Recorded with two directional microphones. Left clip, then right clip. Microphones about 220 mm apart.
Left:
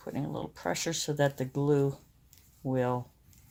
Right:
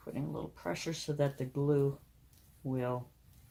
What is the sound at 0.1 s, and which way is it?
Speech, 40° left (ahead or behind).